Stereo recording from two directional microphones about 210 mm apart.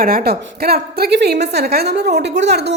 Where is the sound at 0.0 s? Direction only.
45° right (ahead or behind).